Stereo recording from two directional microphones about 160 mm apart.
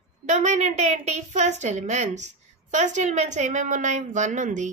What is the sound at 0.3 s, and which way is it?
A woman's voice, 50° right (ahead or behind).